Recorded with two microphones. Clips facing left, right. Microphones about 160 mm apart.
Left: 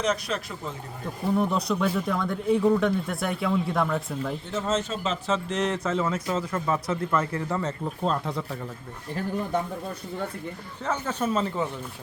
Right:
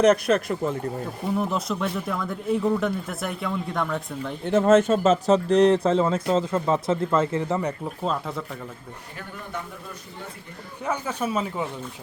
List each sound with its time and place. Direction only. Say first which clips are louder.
0.0 s speech: right 9 dB; 55° right (ahead or behind)
1.3 s speech: left 2 dB; centre (ahead or behind)
4.4 s speech: right 13 dB; 55° right (ahead or behind); by 7.7 s 20° right (ahead or behind)
8.0 s speech: even; centre (ahead or behind)
10.8 s speech: even; 10° right (ahead or behind)